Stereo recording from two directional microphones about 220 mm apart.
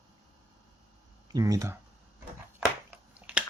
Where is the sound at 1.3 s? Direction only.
15° right (ahead or behind).